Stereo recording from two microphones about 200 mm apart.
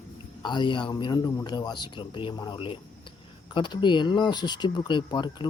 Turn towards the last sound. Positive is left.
turn(degrees=20)  # may be behind; listen again after turning